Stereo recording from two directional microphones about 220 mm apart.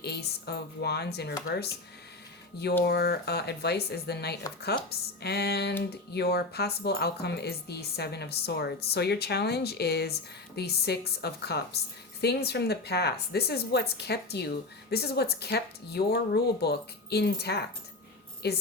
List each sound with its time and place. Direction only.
0.0 s speech: 50° left (ahead or behind)
2.8 s speech: 45° left (ahead or behind)